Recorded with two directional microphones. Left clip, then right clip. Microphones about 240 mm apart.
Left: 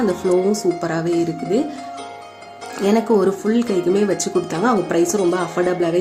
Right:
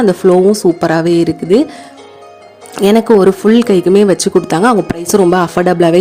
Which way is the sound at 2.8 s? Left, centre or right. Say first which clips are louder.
Right 9 dB; right.